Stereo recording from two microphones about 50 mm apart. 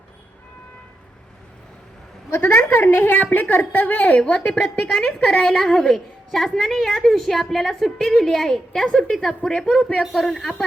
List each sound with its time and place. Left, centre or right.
2.4 s a woman's voice: left
4.4 s a woman's voice: centre
5.3 s a woman's voice: left
5.6 s a woman's voice: centre
10.0 s a woman's voice: centre